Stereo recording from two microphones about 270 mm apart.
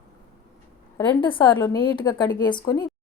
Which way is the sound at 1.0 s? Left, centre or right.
Centre.